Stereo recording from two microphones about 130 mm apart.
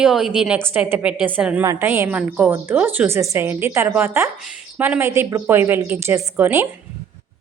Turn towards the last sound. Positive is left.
turn(degrees=-20)  # may be behind; listen again after turning